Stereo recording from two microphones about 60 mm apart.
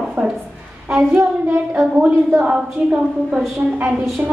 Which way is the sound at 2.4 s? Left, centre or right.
Centre.